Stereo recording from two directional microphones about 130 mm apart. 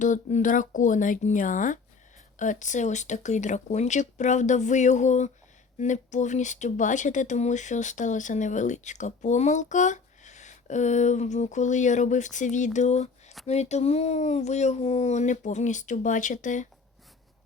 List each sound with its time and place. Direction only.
0.0 s speech: 70° left (ahead or behind)